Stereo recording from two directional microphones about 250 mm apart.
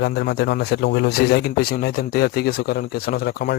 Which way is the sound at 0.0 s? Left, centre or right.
Left.